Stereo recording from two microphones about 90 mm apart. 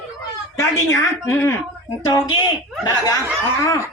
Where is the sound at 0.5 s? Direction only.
30° left (ahead or behind).